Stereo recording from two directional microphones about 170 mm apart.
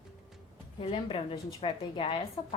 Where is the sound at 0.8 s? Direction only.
30° left (ahead or behind).